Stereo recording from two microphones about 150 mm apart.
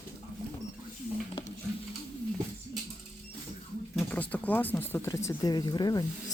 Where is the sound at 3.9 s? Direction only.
10° left (ahead or behind); by 6.3 s 25° left (ahead or behind).